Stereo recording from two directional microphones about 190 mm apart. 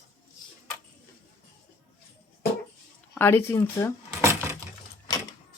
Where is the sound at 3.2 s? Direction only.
10° left (ahead or behind).